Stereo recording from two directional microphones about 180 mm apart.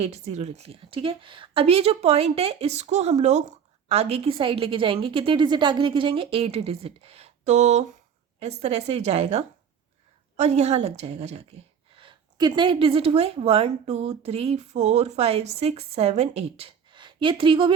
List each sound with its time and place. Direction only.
0.0 s a woman's voice: 40° right (ahead or behind)